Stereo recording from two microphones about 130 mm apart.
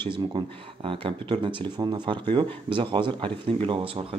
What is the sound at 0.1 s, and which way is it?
Speech, 40° right (ahead or behind).